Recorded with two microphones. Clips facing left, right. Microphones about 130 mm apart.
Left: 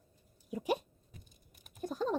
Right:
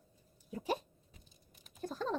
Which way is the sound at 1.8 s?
15° left (ahead or behind).